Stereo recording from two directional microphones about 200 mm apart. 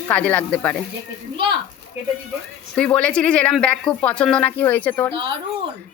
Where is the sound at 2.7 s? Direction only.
5° left (ahead or behind).